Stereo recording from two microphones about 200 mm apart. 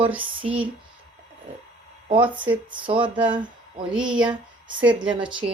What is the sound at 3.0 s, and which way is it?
Speech, 5° right (ahead or behind).